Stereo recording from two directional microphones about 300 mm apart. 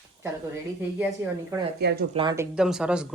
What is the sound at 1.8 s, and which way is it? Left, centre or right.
Speech, right.